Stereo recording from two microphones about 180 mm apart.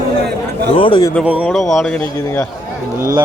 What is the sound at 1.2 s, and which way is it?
Speech, 5° right (ahead or behind).